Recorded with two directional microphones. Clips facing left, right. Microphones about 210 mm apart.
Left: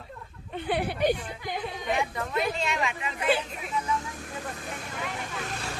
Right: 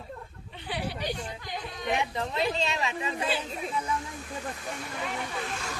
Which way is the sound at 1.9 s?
20° right (ahead or behind).